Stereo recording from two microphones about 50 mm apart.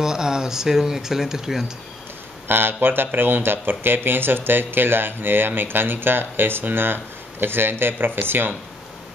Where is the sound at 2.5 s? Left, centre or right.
Right.